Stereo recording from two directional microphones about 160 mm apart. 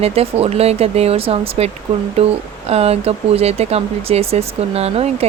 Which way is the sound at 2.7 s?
40° right (ahead or behind).